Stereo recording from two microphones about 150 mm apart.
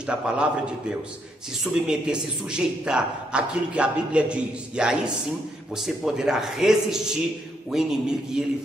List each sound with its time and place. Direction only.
0.0 s a man's voice: 5° right (ahead or behind)